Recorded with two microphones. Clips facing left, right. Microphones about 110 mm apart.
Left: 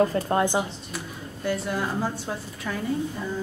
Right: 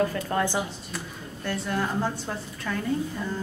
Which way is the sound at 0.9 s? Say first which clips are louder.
Left 1 dB; 5° left (ahead or behind).